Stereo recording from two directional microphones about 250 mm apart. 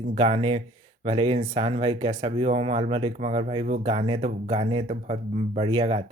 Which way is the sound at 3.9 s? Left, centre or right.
Right.